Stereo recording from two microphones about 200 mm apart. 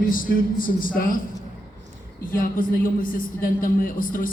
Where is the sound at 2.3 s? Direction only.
45° left (ahead or behind).